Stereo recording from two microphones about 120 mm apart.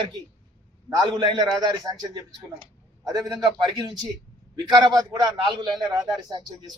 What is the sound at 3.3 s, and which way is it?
Speech, 30° right (ahead or behind).